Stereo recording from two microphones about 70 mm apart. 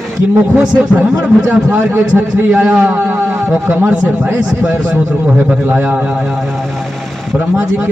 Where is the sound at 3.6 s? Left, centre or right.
Right.